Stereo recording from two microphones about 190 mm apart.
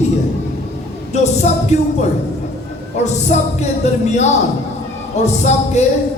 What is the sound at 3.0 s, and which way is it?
Speech, 35° left (ahead or behind).